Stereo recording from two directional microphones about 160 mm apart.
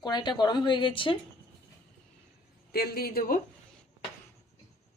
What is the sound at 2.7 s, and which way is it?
Speech, 75° left (ahead or behind).